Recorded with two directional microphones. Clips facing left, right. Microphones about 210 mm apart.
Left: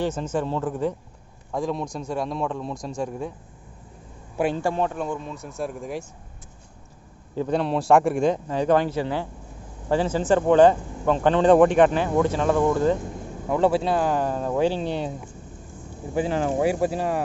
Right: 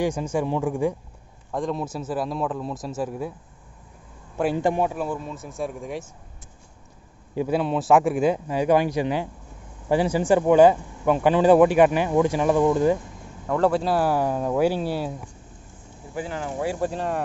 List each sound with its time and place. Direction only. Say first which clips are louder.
0.0 s speech: right 1 dB; 10° right (ahead or behind)
1.5 s a man's voice: even; centre (ahead or behind)
4.6 s a man's voice: right 2 dB; 15° right (ahead or behind); by 6.0 s centre (ahead or behind)
7.3 s speech: even; 5° right (ahead or behind)
13.5 s a man's voice: even; 5° left (ahead or behind)
16.2 s speech: left 7 dB; 25° left (ahead or behind)
16.8 s speech: left 2 dB; 5° left (ahead or behind)